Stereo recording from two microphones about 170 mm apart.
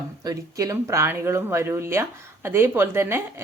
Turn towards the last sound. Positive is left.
turn(degrees=-15)  # may be behind; listen again after turning